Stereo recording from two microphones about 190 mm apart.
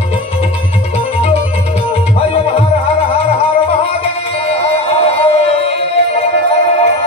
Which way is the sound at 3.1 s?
30° left (ahead or behind).